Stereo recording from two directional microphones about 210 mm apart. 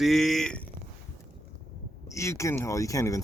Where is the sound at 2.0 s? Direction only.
15° left (ahead or behind).